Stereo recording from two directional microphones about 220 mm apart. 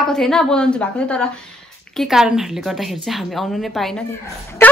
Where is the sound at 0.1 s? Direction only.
5° left (ahead or behind).